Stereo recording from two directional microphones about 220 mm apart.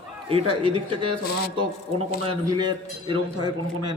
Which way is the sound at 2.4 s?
20° right (ahead or behind).